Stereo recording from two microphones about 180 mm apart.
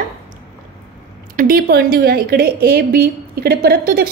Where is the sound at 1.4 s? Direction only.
55° right (ahead or behind).